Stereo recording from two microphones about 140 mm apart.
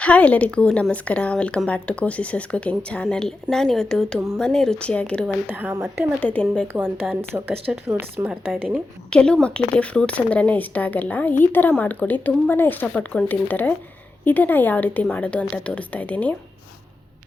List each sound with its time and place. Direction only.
0.0 s a woman's voice: 10° left (ahead or behind)
5.5 s speech: 15° right (ahead or behind)
6.2 s a woman's voice: 5° left (ahead or behind)
7.3 s a woman's voice: 15° right (ahead or behind)
9.0 s a woman's voice: 5° left (ahead or behind)